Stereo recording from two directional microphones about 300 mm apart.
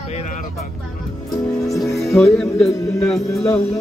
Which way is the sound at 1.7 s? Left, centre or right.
Centre.